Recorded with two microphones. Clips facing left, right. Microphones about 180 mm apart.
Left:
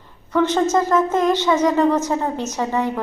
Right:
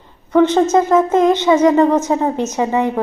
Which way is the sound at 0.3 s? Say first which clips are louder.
Right 5 dB; 20° right (ahead or behind).